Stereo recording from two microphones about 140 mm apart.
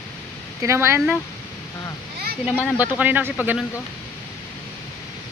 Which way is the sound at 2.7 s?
10° right (ahead or behind).